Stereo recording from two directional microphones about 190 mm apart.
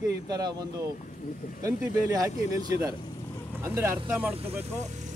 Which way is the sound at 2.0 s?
15° right (ahead or behind).